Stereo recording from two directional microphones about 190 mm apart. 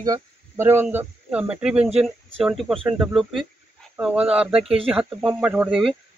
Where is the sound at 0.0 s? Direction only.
15° right (ahead or behind).